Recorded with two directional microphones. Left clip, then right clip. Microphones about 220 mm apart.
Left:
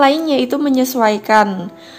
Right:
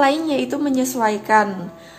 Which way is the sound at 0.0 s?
30° left (ahead or behind).